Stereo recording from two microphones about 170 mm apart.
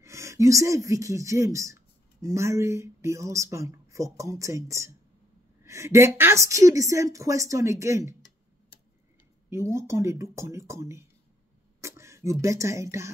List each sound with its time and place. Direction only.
0.0 s speech: 15° right (ahead or behind)
9.5 s speech: 15° right (ahead or behind)